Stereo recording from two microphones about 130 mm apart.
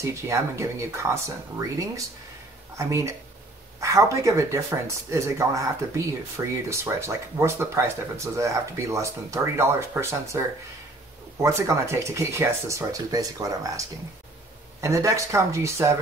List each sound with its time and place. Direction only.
0.0 s speech: 20° right (ahead or behind)
2.8 s speech: 25° right (ahead or behind)
11.4 s speech: 20° right (ahead or behind)